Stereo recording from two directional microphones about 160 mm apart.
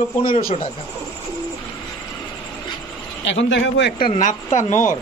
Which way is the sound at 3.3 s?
90° left.